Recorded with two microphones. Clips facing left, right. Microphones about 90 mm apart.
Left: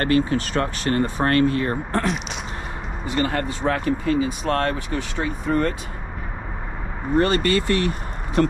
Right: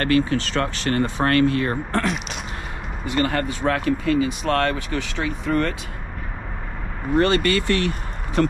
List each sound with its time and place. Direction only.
0.0 s speech: 35° left (ahead or behind)
3.2 s speech: 55° right (ahead or behind); by 5.8 s 75° right (ahead or behind)
7.2 s speech: 30° left (ahead or behind)